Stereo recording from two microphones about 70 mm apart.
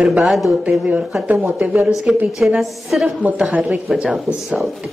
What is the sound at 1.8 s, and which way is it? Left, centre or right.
Speech, centre.